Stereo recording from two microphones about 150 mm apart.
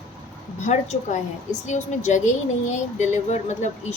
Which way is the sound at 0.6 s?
50° left (ahead or behind).